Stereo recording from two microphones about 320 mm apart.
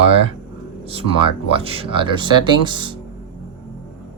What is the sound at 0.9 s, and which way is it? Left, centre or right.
Speech, centre.